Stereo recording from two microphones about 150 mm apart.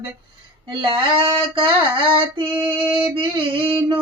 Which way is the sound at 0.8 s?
35° right (ahead or behind).